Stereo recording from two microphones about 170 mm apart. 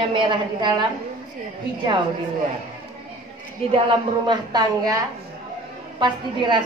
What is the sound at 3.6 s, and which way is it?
Speech, 35° right (ahead or behind).